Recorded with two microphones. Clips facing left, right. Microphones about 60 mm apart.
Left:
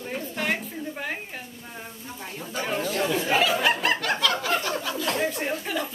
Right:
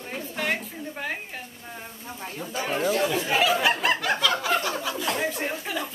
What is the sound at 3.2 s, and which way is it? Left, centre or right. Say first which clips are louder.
Snicker: left 2 dB; centre.